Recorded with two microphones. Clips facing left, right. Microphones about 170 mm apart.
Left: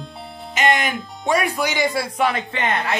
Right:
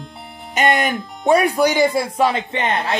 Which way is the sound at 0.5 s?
45° right (ahead or behind).